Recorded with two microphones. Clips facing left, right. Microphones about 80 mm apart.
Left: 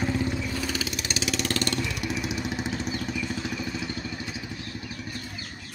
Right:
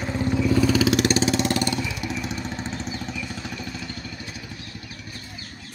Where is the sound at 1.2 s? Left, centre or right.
Right.